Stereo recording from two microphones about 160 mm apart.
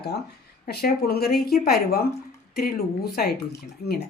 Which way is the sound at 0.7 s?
80° left.